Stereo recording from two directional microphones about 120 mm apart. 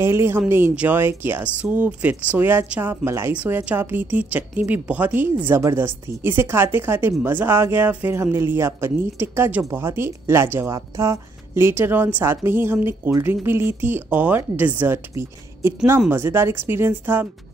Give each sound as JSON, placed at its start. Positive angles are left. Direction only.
{"t": 0.0, "sound": "speech", "side_deg": -20}